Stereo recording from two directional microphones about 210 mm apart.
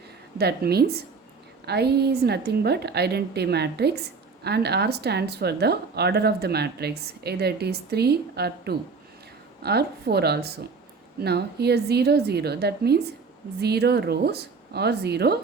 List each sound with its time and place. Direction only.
0.3 s a woman's voice: 50° right (ahead or behind)